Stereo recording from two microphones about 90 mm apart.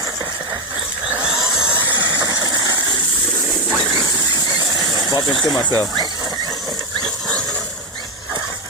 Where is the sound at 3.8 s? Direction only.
5° right (ahead or behind).